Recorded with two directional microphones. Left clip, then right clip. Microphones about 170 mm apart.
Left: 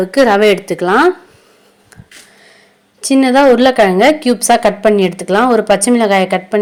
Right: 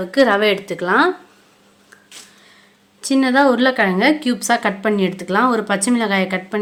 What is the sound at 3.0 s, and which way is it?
A woman's voice, 25° left (ahead or behind).